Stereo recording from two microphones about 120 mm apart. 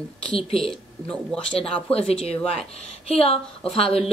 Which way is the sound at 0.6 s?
5° left (ahead or behind).